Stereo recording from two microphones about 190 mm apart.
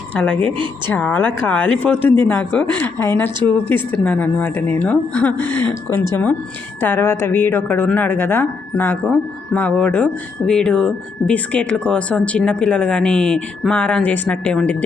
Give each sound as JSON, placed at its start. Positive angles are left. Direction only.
{"t": 0.1, "sound": "a woman's voice", "side_deg": 5}